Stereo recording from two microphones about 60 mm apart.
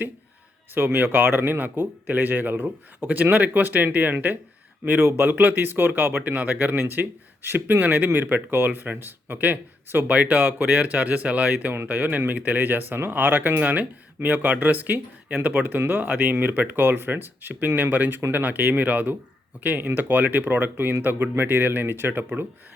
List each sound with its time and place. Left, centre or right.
0.7 s a man's voice: right
4.9 s speech: right
5.2 s a man's voice: right